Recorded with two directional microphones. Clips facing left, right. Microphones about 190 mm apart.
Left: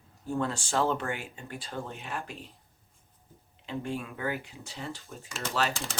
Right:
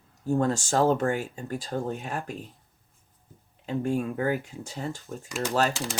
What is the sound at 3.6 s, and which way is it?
Speech, 45° right (ahead or behind).